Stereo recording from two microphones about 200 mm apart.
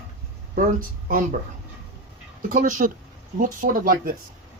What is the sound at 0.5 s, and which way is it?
Speech, 45° right (ahead or behind).